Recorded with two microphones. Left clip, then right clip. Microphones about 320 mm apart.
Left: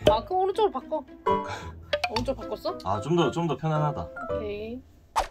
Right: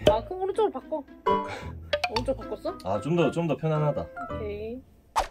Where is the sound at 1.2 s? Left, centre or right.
Centre.